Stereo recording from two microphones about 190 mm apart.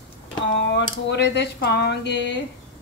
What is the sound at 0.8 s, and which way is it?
Speech, 65° left (ahead or behind).